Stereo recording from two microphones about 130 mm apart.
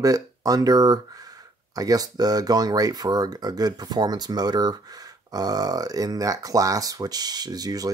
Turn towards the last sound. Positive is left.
turn(degrees=-30)  # may be behind; listen again after turning